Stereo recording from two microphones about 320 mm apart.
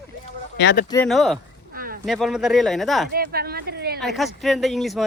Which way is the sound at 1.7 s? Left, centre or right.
Right.